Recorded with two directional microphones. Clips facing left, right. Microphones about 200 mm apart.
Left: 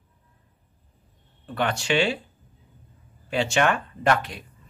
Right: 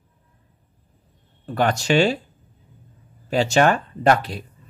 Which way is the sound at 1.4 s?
40° right (ahead or behind).